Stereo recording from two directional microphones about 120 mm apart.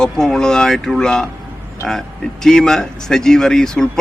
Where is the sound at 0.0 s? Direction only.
5° left (ahead or behind).